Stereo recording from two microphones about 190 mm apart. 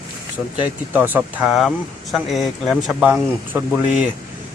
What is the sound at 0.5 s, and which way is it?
Speech, 10° right (ahead or behind).